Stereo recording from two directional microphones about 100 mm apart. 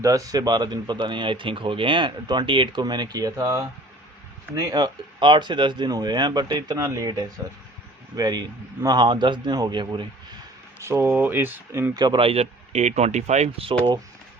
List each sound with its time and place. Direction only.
0.0 s speech: 35° right (ahead or behind)
4.8 s speech: 50° right (ahead or behind)
11.0 s speech: 20° right (ahead or behind)
11.9 s speech: 45° right (ahead or behind)
12.2 s speech: 80° right
13.6 s speech: 80° right